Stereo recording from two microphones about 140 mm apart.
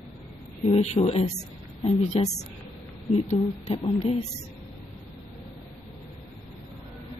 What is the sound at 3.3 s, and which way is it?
Speech, 45° left (ahead or behind).